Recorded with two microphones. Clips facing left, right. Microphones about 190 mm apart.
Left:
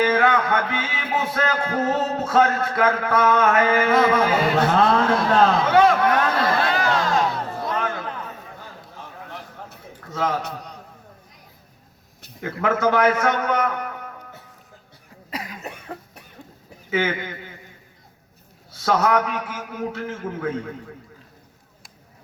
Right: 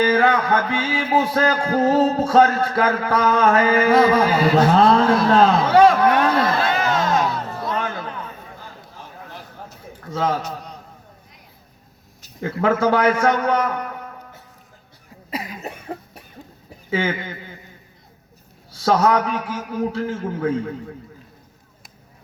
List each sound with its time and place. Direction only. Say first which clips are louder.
0.0 s music: right 2 dB; 30° right (ahead or behind)
7.8 s a sound: even; 30° right (ahead or behind)
10.1 s a man's voice: right 3 dB; 30° right (ahead or behind)
12.4 s music: right 3 dB; 30° right (ahead or behind)
15.3 s cough: right 3 dB; 5° right (ahead or behind)
16.9 s music: right 1 dB; 30° right (ahead or behind)
18.7 s music: right 3 dB; 30° right (ahead or behind)